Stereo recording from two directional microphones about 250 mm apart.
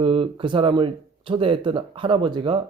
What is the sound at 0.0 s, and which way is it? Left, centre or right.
Speech, right.